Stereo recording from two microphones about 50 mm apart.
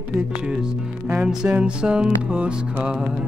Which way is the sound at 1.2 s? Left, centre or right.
Centre.